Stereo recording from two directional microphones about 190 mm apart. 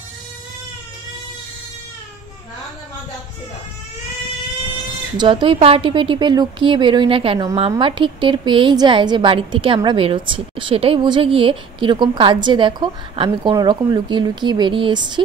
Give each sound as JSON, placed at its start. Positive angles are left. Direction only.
{"t": 5.1, "sound": "a woman's voice", "side_deg": -25}